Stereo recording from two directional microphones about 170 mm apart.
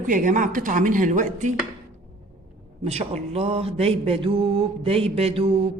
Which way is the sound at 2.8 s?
40° right (ahead or behind).